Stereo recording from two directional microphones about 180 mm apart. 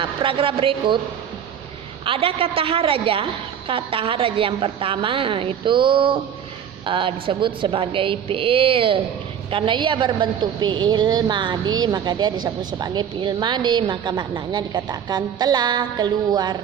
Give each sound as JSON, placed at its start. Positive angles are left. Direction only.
{"t": 0.0, "sound": "a woman's voice", "side_deg": -30}
{"t": 2.0, "sound": "a woman's voice", "side_deg": -30}